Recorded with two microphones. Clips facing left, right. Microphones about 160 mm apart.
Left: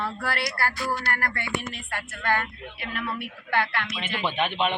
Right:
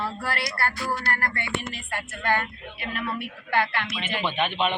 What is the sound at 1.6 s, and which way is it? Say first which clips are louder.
Speech: right 1 dB; 10° right (ahead or behind).